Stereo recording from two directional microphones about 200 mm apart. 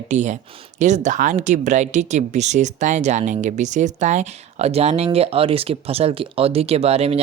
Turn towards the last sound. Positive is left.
turn(degrees=-30)  # may be behind; listen again after turning